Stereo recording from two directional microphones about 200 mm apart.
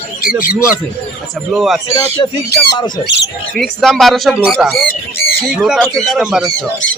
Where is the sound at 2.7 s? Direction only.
20° left (ahead or behind).